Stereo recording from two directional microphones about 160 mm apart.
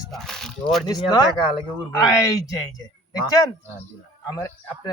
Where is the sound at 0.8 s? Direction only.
25° left (ahead or behind).